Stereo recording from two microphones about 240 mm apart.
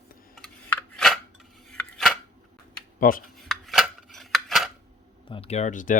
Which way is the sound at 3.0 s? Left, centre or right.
Left.